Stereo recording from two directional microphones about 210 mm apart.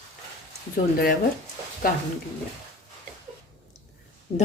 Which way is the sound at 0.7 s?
45° left (ahead or behind).